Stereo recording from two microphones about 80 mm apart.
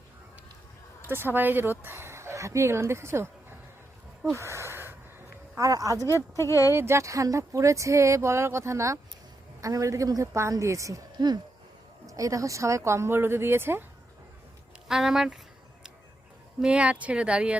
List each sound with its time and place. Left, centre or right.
1.0 s a woman's voice: right
4.4 s gasp: right
5.5 s a woman's voice: right
6.4 s speech: left
6.7 s a woman's voice: right
12.0 s a woman's voice: right
14.8 s speech: centre
16.6 s speech: centre